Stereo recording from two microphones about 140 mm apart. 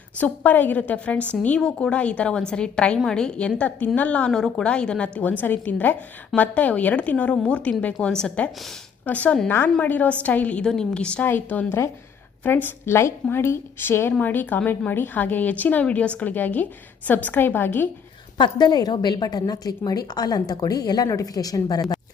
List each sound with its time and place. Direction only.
0.2 s a woman's voice: 10° left (ahead or behind)
18.3 s a woman's voice: 30° left (ahead or behind)